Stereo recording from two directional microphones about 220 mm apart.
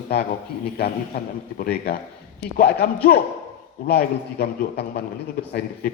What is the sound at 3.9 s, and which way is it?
A man's voice, 45° left (ahead or behind).